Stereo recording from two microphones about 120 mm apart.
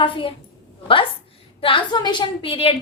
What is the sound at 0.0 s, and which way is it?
Speech, 45° left (ahead or behind).